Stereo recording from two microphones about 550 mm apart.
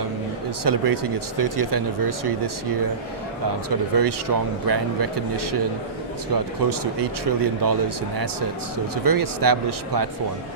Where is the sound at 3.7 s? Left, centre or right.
Right.